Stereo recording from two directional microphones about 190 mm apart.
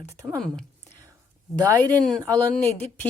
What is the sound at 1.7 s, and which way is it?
Speech, 10° left (ahead or behind).